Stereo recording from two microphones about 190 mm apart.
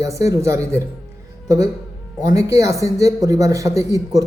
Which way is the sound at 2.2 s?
20° right (ahead or behind).